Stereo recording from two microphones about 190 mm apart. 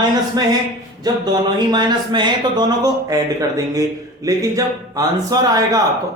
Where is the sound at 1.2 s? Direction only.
20° right (ahead or behind).